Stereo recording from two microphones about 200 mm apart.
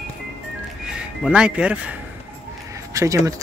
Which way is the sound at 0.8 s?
5° right (ahead or behind).